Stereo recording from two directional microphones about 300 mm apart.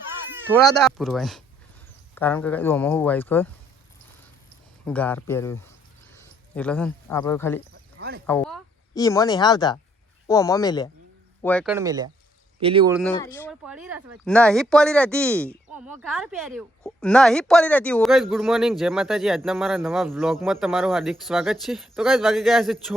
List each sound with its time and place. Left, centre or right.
0.4 s speech: centre
4.9 s speech: centre
6.6 s speech: centre
11.4 s speech: centre
12.9 s speech: centre